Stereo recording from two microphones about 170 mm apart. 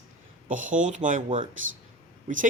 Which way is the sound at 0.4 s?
50° right (ahead or behind).